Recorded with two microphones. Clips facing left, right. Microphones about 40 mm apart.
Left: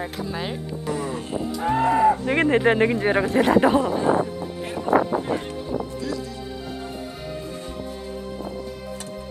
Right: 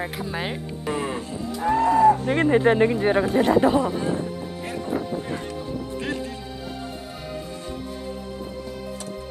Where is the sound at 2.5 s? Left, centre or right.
Left.